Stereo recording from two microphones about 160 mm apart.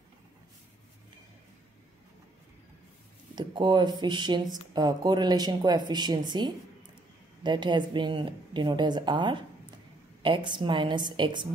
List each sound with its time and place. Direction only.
3.3 s a woman's voice: 30° right (ahead or behind)